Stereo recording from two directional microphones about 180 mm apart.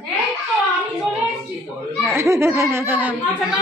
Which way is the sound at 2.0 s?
15° right (ahead or behind).